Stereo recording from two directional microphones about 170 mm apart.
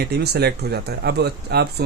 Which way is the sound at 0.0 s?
75° right (ahead or behind).